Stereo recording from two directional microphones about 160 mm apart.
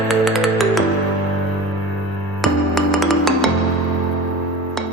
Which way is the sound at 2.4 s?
Centre (ahead or behind).